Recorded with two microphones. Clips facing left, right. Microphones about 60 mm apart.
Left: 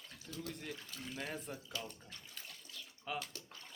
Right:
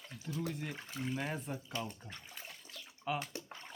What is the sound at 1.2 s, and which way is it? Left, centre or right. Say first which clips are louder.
Speech: right 4 dB; centre.